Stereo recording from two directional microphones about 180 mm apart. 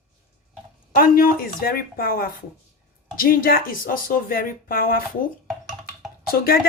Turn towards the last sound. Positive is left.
turn(degrees=55)  # may be behind; listen again after turning